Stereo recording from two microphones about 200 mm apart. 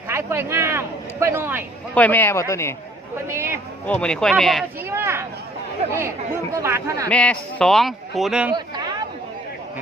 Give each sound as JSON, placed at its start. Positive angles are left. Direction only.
{"t": 0.1, "sound": "a sound", "side_deg": -10}
{"t": 2.0, "sound": "speech", "side_deg": 10}
{"t": 3.2, "sound": "speech", "side_deg": -15}
{"t": 3.8, "sound": "a man's voice", "side_deg": 5}
{"t": 4.9, "sound": "speech", "side_deg": -10}
{"t": 7.1, "sound": "a man's voice", "side_deg": 5}
{"t": 8.5, "sound": "chatter", "side_deg": -20}